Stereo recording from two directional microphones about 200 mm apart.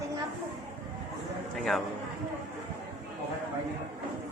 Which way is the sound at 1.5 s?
Centre (ahead or behind).